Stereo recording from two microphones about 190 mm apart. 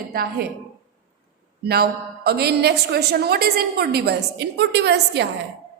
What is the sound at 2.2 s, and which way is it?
A woman's voice, 55° right (ahead or behind).